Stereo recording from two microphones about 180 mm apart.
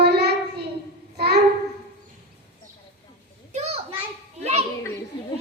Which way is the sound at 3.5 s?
35° right (ahead or behind).